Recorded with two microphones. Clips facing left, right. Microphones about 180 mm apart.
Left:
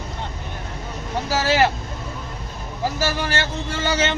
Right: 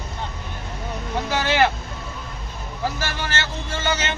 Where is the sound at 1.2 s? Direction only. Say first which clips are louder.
Left 3 dB; 35° left (ahead or behind).